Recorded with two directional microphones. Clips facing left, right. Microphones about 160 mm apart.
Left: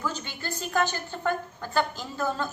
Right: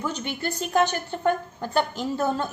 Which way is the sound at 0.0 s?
25° right (ahead or behind).